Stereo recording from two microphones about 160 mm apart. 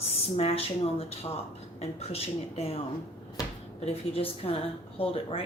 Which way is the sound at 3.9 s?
35° left (ahead or behind).